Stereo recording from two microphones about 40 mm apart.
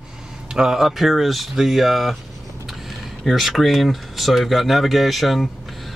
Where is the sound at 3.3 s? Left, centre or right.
Centre.